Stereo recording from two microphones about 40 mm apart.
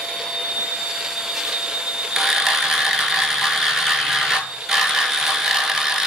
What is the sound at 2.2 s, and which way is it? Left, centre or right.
Ratchet, centre.